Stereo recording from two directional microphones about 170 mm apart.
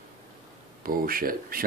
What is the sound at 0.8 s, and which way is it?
Speech, 60° right (ahead or behind).